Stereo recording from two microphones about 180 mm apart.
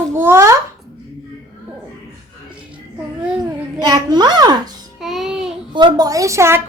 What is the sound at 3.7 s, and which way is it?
Speech, 25° right (ahead or behind).